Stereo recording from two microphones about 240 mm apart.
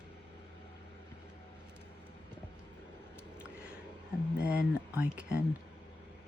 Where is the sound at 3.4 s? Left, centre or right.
Centre.